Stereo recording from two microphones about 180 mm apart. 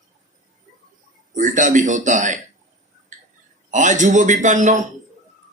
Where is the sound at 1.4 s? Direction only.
45° right (ahead or behind).